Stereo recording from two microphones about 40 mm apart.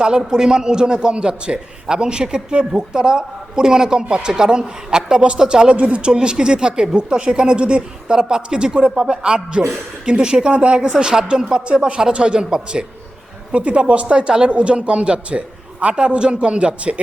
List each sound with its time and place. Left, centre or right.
0.2 s a man's voice: centre; by 6.1 s right
6.1 s a man's voice: centre
13.5 s a man's voice: right